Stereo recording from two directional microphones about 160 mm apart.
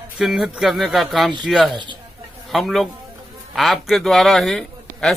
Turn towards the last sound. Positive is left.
turn(degrees=0)  # may be behind; listen again after turning